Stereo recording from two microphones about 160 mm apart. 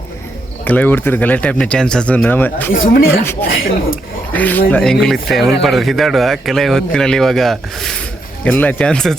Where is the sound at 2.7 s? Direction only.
70° left (ahead or behind).